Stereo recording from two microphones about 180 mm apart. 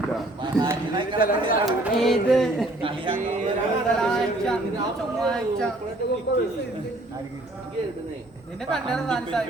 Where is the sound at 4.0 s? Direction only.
5° left (ahead or behind).